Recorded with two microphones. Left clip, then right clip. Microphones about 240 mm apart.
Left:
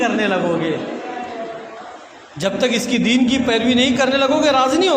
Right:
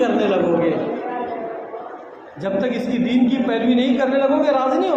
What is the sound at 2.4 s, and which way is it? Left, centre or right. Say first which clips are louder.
A man's voice: left 3 dB; left.